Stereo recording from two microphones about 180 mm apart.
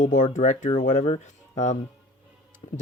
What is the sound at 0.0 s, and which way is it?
Speech, 45° left (ahead or behind).